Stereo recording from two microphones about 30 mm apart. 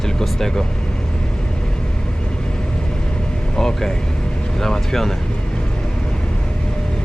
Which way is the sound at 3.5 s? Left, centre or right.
Centre.